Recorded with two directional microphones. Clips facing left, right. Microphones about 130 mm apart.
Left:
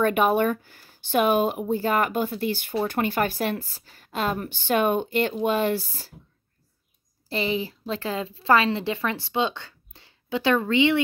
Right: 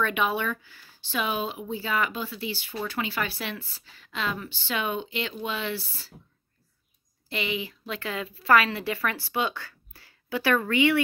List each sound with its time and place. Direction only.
0.0 s speech: 45° left (ahead or behind)
7.2 s a woman's voice: 35° left (ahead or behind)